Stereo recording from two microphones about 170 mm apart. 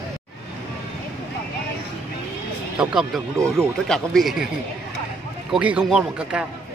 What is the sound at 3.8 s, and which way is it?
Speech, 5° left (ahead or behind).